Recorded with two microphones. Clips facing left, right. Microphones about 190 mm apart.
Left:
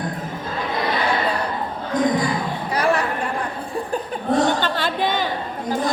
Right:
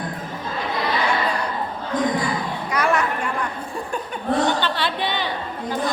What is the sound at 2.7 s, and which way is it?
Chatter, 30° left (ahead or behind).